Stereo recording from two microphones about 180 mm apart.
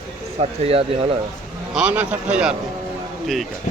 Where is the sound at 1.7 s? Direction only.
5° right (ahead or behind).